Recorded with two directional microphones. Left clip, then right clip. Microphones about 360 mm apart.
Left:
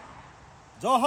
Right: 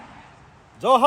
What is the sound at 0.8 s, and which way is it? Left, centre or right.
Speech, centre.